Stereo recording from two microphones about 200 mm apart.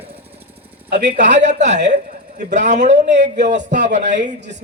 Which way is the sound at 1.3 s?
35° right (ahead or behind).